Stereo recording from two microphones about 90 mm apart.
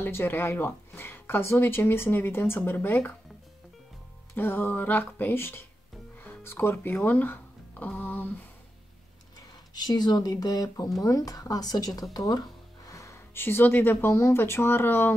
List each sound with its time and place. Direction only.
0.0 s speech: 25° left (ahead or behind)
4.4 s speech: 25° left (ahead or behind)
9.8 s speech: 50° left (ahead or behind); by 15.1 s 25° left (ahead or behind)